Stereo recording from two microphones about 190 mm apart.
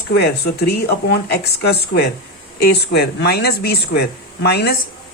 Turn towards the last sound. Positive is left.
turn(degrees=60)  # may be behind; listen again after turning